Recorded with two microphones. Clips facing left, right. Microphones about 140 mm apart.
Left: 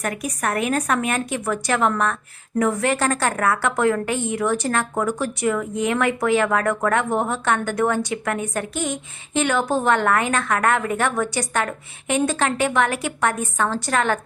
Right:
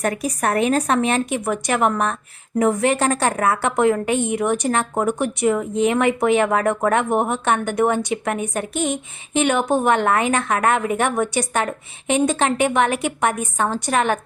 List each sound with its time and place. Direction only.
0.0 s a woman's voice: 30° right (ahead or behind)